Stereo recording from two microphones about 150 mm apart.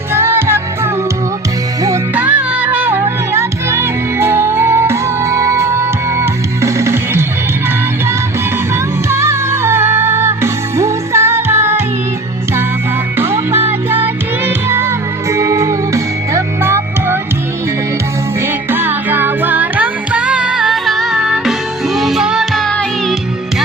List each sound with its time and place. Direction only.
0.1 s music: 15° right (ahead or behind)
2.1 s music: 10° right (ahead or behind)
9.0 s music: 15° right (ahead or behind)
13.1 s music: 15° right (ahead or behind)
18.7 s music: 15° right (ahead or behind)